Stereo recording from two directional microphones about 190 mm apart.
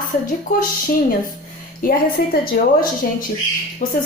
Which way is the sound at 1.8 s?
50° left (ahead or behind).